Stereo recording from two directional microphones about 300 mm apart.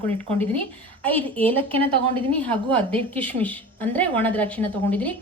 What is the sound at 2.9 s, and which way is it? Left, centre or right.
A woman's voice, centre.